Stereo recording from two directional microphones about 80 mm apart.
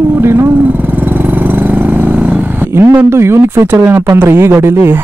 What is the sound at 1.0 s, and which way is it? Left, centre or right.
Vehicle, right.